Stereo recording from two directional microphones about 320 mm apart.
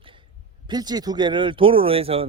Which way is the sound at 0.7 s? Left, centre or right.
Centre.